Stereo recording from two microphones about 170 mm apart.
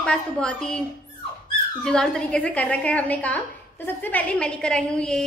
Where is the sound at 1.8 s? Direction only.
5° left (ahead or behind).